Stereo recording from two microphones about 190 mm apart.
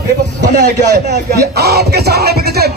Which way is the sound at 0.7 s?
65° right (ahead or behind).